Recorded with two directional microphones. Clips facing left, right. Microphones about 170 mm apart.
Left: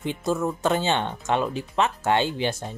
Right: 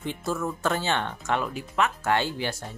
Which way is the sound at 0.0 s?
20° left (ahead or behind).